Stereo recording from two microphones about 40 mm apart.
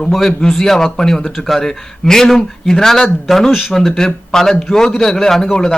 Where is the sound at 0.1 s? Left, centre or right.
Centre.